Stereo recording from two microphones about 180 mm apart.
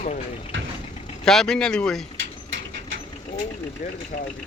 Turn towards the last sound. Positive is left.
turn(degrees=50)  # may be behind; listen again after turning